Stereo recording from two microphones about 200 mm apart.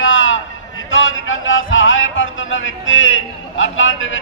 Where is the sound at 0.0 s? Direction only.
75° left (ahead or behind).